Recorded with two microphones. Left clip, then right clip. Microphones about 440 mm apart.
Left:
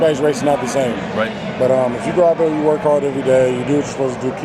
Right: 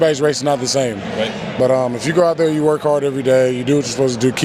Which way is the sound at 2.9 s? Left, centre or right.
Right.